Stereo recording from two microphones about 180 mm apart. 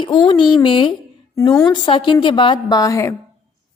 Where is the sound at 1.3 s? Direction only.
15° left (ahead or behind).